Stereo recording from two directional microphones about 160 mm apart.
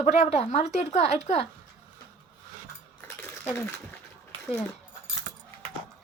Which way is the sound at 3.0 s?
15° left (ahead or behind).